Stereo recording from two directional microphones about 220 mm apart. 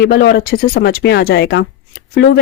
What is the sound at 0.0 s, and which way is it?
Speech, 50° left (ahead or behind).